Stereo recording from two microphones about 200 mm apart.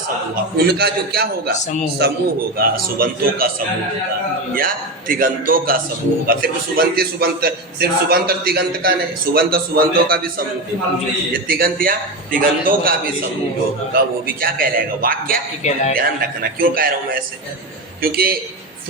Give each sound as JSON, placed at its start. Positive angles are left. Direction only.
{"t": 0.3, "sound": "a man's voice", "side_deg": -50}
{"t": 4.5, "sound": "a man's voice", "side_deg": -45}
{"t": 11.4, "sound": "a man's voice", "side_deg": -45}
{"t": 14.4, "sound": "a man's voice", "side_deg": -45}
{"t": 15.6, "sound": "speech", "side_deg": 35}
{"t": 16.0, "sound": "a man's voice", "side_deg": -45}
{"t": 18.0, "sound": "a man's voice", "side_deg": -50}